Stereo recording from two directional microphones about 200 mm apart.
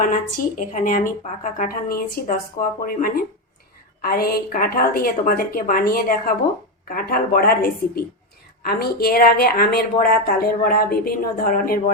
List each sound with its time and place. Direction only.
0.6 s a woman's voice: 40° left (ahead or behind)